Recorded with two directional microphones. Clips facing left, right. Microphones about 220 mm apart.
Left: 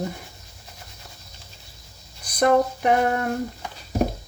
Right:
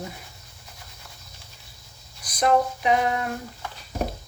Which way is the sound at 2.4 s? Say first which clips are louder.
Left 3 dB; 55° left (ahead or behind).